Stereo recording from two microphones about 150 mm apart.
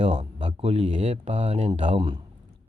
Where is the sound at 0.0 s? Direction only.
40° right (ahead or behind).